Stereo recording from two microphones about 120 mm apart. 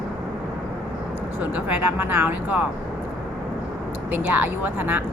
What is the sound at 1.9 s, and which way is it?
Speech, 20° right (ahead or behind).